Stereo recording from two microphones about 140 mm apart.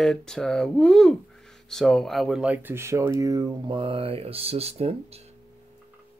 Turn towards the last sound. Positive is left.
turn(degrees=-45)  # may be behind; listen again after turning